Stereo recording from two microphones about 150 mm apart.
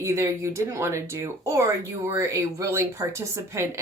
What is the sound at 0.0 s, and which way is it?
Speech, 20° right (ahead or behind).